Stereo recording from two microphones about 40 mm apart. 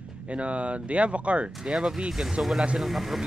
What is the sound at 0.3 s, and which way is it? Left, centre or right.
Speech, right.